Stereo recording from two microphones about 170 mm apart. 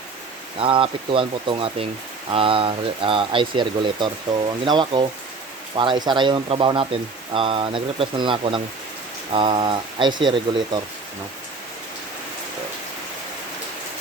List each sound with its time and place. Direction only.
0.6 s speech: 30° right (ahead or behind)